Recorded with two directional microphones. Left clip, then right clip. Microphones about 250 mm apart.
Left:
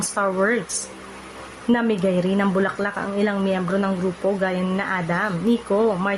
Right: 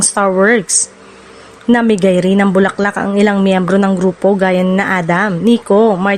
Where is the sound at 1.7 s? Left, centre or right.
Right.